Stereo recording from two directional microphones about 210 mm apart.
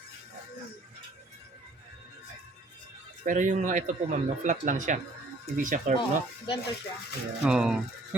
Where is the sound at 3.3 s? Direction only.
35° right (ahead or behind).